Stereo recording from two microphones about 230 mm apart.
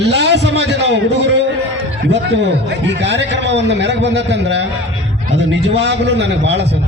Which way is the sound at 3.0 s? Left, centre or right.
Right.